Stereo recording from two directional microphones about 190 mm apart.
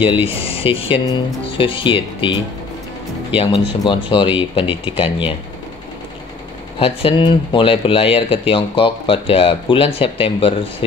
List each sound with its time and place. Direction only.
0.0 s speech: 30° left (ahead or behind)
6.8 s speech: 30° left (ahead or behind)